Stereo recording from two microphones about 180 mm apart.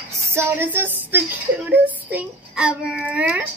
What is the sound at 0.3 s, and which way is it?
A woman's voice, 15° right (ahead or behind).